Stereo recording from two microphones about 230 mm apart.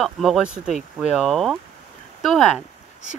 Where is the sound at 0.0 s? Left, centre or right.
Centre.